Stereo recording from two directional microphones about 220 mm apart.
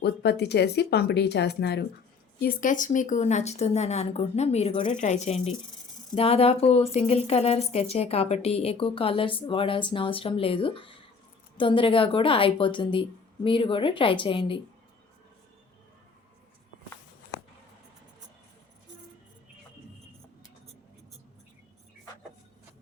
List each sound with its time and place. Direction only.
0.0 s speech: 50° left (ahead or behind); by 14.6 s 25° left (ahead or behind)